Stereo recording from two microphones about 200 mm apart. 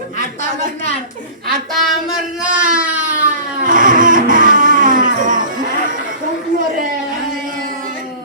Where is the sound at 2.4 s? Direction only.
5° right (ahead or behind).